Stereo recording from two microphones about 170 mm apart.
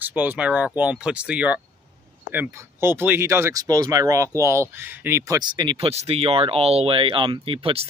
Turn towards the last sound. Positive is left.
turn(degrees=-35)  # may be behind; listen again after turning